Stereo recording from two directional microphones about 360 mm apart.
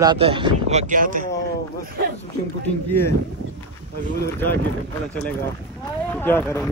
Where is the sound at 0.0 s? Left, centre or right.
Centre.